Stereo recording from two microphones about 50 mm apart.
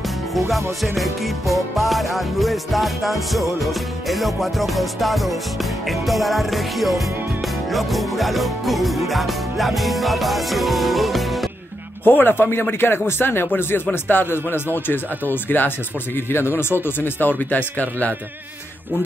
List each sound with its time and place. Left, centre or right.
0.5 s music: centre
12.0 s speech: left
16.3 s speech: left